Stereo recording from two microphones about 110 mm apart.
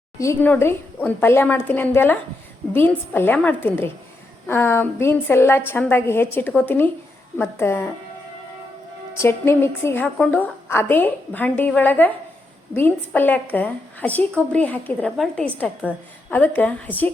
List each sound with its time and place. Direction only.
0.2 s a woman's voice: 25° left (ahead or behind)
9.1 s a woman's voice: 25° left (ahead or behind)